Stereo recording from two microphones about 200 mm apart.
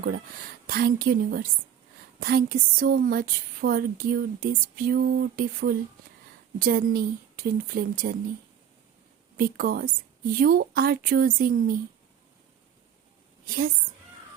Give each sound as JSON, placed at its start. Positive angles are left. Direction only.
{"t": 0.7, "sound": "speech", "side_deg": -50}
{"t": 9.4, "sound": "speech", "side_deg": -50}
{"t": 13.4, "sound": "a woman's voice", "side_deg": -45}